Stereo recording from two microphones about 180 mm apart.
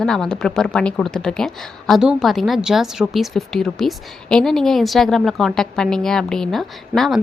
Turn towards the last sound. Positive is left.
turn(degrees=0)  # may be behind; listen again after turning